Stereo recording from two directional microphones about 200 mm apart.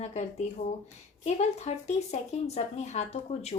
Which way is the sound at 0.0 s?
35° left (ahead or behind).